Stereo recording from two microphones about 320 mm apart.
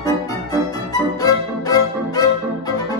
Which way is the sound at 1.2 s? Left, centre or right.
Centre.